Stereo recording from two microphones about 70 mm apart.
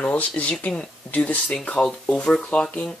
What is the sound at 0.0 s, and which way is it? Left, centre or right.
Speech, left.